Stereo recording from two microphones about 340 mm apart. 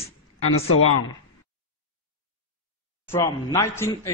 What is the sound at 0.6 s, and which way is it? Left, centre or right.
Speech, left.